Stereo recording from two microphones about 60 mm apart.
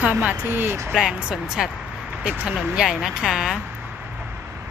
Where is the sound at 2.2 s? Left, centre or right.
Right.